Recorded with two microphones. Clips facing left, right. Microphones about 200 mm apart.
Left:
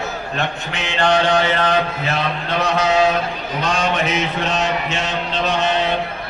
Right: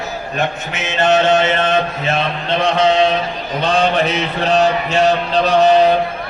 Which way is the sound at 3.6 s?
35° right (ahead or behind).